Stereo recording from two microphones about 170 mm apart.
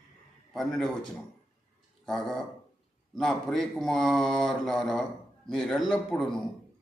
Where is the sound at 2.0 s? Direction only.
Centre (ahead or behind).